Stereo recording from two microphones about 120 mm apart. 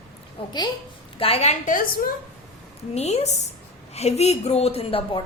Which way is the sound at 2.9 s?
65° left (ahead or behind).